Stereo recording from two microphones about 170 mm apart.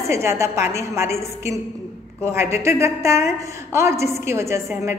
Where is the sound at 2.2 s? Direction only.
15° right (ahead or behind).